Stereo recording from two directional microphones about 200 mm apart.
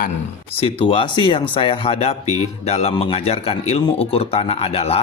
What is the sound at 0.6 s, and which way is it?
Speech, 25° left (ahead or behind).